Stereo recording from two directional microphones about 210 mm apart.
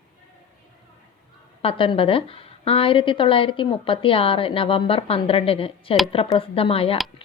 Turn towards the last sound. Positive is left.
turn(degrees=25)  # may be behind; listen again after turning